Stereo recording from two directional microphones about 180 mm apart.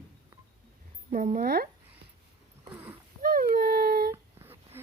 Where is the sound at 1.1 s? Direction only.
45° right (ahead or behind).